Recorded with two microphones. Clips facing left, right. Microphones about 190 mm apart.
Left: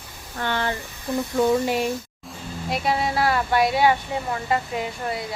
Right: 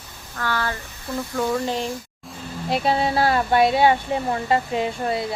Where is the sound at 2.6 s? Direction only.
30° right (ahead or behind).